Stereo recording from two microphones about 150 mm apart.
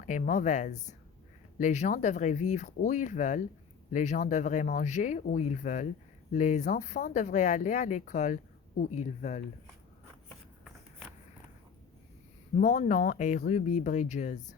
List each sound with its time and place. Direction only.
0.0 s speech: 55° left (ahead or behind)
12.5 s speech: 60° left (ahead or behind)